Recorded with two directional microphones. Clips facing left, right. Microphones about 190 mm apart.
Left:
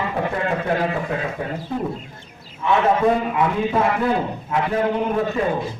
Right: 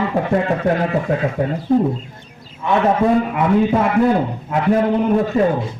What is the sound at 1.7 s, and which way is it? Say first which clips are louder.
Speech: right 12 dB; 45° right (ahead or behind).